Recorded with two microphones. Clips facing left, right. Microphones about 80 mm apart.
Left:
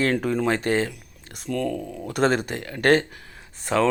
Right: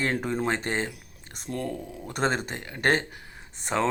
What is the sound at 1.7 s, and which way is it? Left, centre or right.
Speech, left.